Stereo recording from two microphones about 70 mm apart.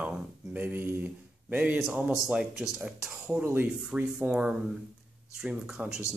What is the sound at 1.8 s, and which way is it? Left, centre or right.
Speech, centre.